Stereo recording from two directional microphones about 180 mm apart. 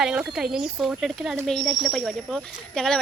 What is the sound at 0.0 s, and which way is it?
Speech, 5° right (ahead or behind).